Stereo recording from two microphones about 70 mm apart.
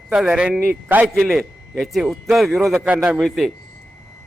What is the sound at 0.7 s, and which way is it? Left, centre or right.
Speech, right.